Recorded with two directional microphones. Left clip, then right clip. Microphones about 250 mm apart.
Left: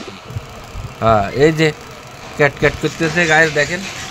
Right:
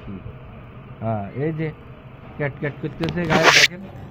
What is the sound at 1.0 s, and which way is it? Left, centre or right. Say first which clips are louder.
Speech: left 14 dB; left.